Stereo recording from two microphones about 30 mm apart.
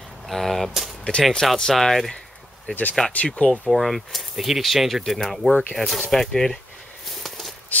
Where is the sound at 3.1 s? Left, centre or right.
Left.